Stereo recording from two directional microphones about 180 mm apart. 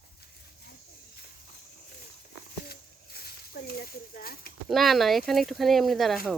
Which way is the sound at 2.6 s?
60° left (ahead or behind).